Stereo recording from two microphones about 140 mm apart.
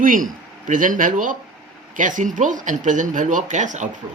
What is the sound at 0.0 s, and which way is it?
Speech, 75° right (ahead or behind).